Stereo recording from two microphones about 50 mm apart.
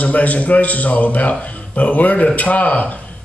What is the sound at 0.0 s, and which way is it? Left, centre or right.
A man's voice, left.